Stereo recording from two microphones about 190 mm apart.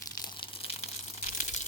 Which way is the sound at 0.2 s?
25° left (ahead or behind).